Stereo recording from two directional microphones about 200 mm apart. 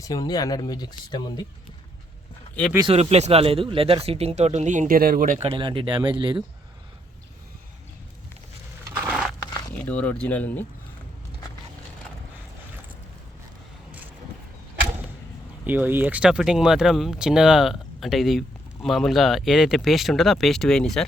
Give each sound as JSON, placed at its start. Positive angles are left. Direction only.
{"t": 0.0, "sound": "speech", "side_deg": 20}
{"t": 2.7, "sound": "speech", "side_deg": -25}
{"t": 5.5, "sound": "speech", "side_deg": -25}
{"t": 8.9, "sound": "a sound", "side_deg": -10}
{"t": 9.7, "sound": "speech", "side_deg": 10}
{"t": 15.6, "sound": "speech", "side_deg": -10}